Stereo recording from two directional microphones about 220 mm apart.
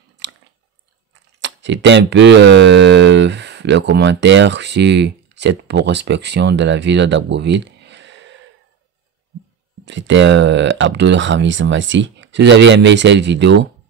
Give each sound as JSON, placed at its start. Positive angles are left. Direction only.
{"t": 0.2, "sound": "chewing", "side_deg": -55}
{"t": 1.4, "sound": "speech", "side_deg": -55}
{"t": 9.8, "sound": "speech", "side_deg": -55}